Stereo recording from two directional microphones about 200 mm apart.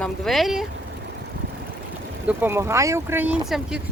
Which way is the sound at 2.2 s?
10° right (ahead or behind).